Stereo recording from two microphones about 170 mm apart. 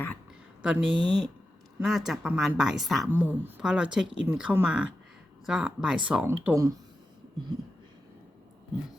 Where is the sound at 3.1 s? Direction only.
10° right (ahead or behind).